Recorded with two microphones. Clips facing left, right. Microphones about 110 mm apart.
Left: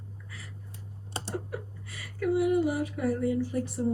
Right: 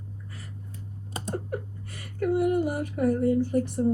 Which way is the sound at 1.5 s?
50° right (ahead or behind).